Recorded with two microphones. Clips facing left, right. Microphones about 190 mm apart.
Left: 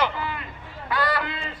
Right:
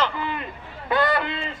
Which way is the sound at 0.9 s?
25° right (ahead or behind).